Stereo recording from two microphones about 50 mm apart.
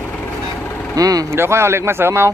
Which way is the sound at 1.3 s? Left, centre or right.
Right.